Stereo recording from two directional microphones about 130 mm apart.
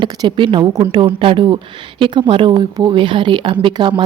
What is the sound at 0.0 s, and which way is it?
A woman's voice, 40° right (ahead or behind).